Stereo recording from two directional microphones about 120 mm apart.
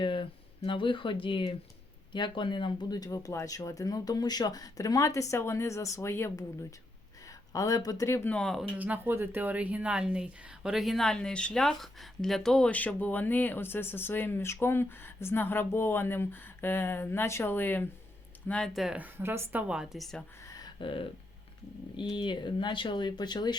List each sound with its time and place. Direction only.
0.0 s speech: 45° left (ahead or behind); by 8.3 s 20° left (ahead or behind)
8.3 s a woman's voice: 5° left (ahead or behind)
8.8 s a woman's voice: 15° right (ahead or behind)
18.9 s speech: 15° right (ahead or behind)
19.6 s a woman's voice: 5° right (ahead or behind)
20.4 s a sound: 30° left (ahead or behind)
20.7 s a sound: 45° left (ahead or behind)
21.9 s speech: 40° left (ahead or behind)